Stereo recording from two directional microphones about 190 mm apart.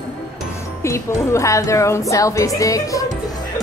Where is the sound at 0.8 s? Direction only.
15° left (ahead or behind).